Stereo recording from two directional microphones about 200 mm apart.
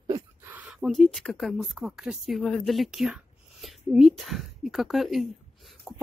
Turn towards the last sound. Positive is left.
turn(degrees=0)  # may be behind; listen again after turning